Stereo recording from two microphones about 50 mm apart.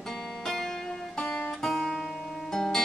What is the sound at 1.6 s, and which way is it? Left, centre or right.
Music, centre.